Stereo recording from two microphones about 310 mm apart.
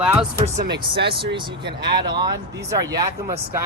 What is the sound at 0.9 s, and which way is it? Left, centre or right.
Speech, centre.